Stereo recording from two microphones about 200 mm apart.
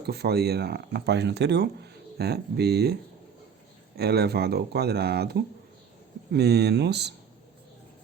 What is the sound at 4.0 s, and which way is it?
Speech, 55° right (ahead or behind).